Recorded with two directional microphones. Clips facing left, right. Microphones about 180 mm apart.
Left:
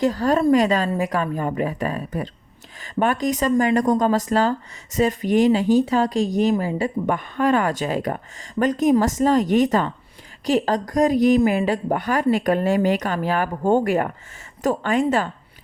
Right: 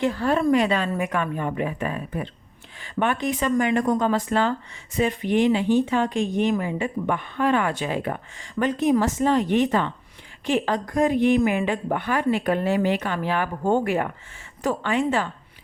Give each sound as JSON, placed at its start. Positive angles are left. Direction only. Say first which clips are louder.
{"t": 0.0, "sound": "a woman's voice", "louder": "left 3 dB", "side_deg": 40}